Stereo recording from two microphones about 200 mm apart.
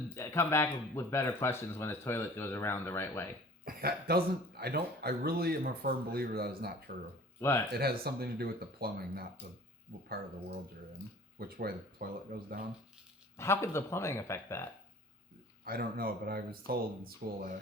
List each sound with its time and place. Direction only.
0.1 s speech: 15° left (ahead or behind)
3.7 s a man's voice: 50° right (ahead or behind)
11.3 s a man's voice: 50° right (ahead or behind)
13.3 s speech: 15° left (ahead or behind)
15.6 s a man's voice: 45° right (ahead or behind)